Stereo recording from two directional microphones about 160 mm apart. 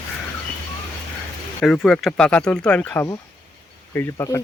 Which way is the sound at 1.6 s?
5° left (ahead or behind).